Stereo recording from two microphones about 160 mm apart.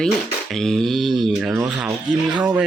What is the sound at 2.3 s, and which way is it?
Speech, 30° right (ahead or behind).